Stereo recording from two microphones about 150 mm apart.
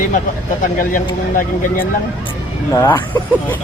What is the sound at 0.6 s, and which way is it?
Speech, 65° left (ahead or behind).